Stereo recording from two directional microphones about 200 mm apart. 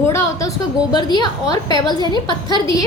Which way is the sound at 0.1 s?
15° left (ahead or behind).